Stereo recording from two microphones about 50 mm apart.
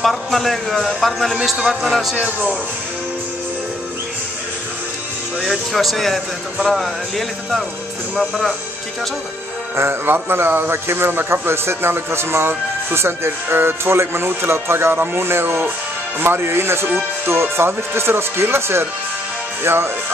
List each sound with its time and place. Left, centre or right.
0.0 s a man's voice: centre
5.4 s a man's voice: centre
9.8 s a man's voice: right